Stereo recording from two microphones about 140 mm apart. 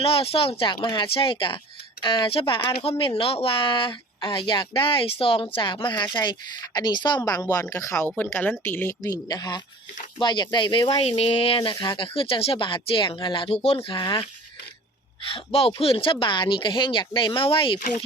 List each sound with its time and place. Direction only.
0.0 s speech: 45° left (ahead or behind); by 9.0 s 15° left (ahead or behind)
9.0 s speech: 30° left (ahead or behind); by 13.9 s 45° left (ahead or behind)
13.9 s speech: 35° left (ahead or behind)
15.3 s speech: 45° left (ahead or behind)